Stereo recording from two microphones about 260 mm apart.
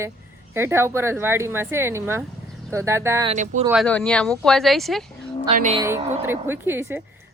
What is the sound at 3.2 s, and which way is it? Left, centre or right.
Speech, right.